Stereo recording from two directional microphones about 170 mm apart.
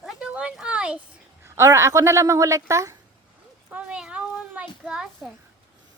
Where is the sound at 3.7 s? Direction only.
5° right (ahead or behind).